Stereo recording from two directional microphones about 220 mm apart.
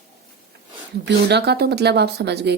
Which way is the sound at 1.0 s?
50° right (ahead or behind).